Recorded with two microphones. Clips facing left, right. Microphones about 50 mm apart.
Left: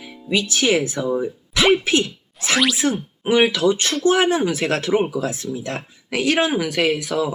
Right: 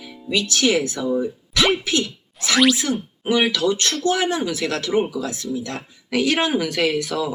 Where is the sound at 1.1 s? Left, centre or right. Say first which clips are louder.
Even; centre.